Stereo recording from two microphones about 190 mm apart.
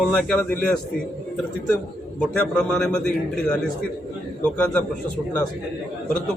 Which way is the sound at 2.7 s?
5° left (ahead or behind).